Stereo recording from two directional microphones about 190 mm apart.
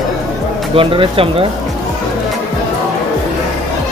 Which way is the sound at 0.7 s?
30° right (ahead or behind).